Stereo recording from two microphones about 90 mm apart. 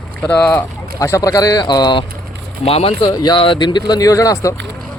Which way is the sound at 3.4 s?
60° left (ahead or behind).